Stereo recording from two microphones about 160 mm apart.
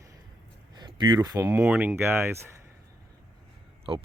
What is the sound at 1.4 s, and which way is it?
Speech, 10° right (ahead or behind).